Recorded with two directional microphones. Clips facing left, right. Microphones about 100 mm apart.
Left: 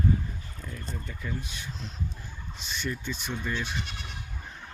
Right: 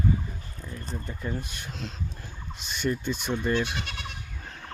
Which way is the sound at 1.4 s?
55° right (ahead or behind).